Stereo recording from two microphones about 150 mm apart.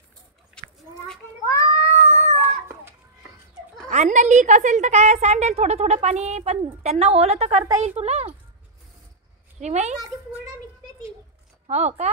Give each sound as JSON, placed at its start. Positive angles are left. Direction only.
{"t": 0.6, "sound": "chicken", "side_deg": 5}
{"t": 1.4, "sound": "cat", "side_deg": 20}
{"t": 3.9, "sound": "a woman's voice", "side_deg": -50}
{"t": 9.6, "sound": "a woman's voice", "side_deg": -50}
{"t": 9.9, "sound": "a child's voice", "side_deg": -25}
{"t": 11.6, "sound": "speech", "side_deg": -50}